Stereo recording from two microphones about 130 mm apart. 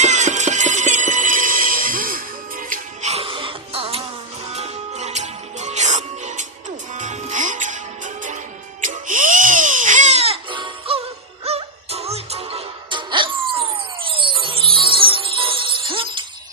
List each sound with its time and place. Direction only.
0.0 s music: 65° right (ahead or behind); by 4.0 s 45° right (ahead or behind)
4.5 s music: 55° right (ahead or behind); by 8.4 s 75° right (ahead or behind)
8.8 s crying: 85° right; by 11.0 s 45° right (ahead or behind)
11.4 s music: 50° right (ahead or behind)